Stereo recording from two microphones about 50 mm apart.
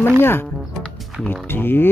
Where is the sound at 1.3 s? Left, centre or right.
Left.